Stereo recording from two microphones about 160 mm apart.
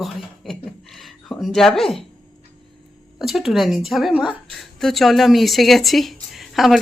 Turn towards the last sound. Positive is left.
turn(degrees=0)  # may be behind; listen again after turning